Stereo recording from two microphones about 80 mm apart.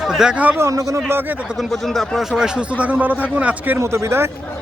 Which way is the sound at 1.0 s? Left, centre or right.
Right.